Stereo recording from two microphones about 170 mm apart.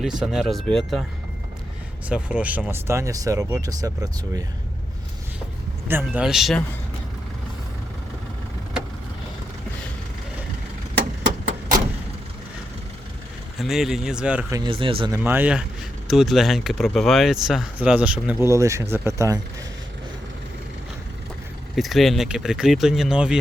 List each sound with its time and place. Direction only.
0.0 s speech: 5° right (ahead or behind)
2.0 s speech: 10° right (ahead or behind)
5.9 s speech: 10° right (ahead or behind)
13.6 s speech: centre (ahead or behind)
14.5 s speech: 30° right (ahead or behind)
15.1 s speech: 10° right (ahead or behind)
21.8 s speech: centre (ahead or behind)